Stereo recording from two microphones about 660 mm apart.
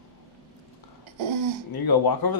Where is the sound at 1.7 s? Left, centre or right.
Left.